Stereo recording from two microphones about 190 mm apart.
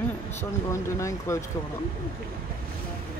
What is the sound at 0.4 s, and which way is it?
Speech, 15° left (ahead or behind).